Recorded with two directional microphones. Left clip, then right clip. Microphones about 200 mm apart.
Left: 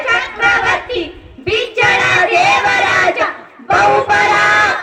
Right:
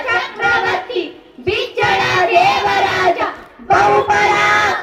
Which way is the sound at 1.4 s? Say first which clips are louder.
Left 3 dB; 50° left (ahead or behind).